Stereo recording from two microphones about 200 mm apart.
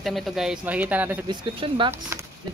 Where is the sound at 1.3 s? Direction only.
25° right (ahead or behind).